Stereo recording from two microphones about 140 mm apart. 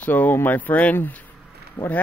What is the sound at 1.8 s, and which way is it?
Speech, 35° left (ahead or behind).